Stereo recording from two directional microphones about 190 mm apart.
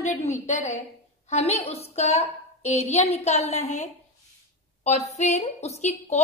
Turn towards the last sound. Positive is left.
turn(degrees=35)  # may be behind; listen again after turning